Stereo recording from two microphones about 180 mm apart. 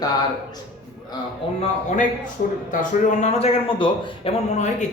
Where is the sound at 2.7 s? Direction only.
45° left (ahead or behind).